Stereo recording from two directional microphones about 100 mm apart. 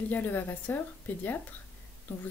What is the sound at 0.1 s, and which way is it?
A woman's voice, 20° left (ahead or behind).